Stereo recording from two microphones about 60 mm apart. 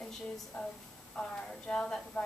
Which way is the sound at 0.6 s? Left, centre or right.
Centre.